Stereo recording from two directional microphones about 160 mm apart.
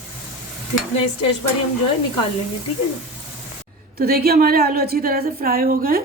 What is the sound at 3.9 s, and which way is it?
A woman's voice, 75° right (ahead or behind).